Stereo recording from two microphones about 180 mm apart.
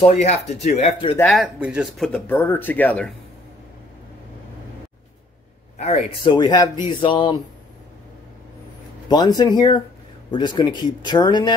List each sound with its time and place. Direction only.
0.0 s speech: 35° left (ahead or behind)
1.3 s speech: 5° right (ahead or behind)
2.1 s speech: 10° left (ahead or behind)
5.8 s speech: 40° left (ahead or behind)
6.3 s speech: 25° left (ahead or behind)
9.1 s speech: 20° left (ahead or behind)